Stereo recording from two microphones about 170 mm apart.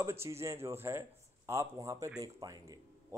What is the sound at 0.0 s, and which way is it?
A man's voice, 15° right (ahead or behind).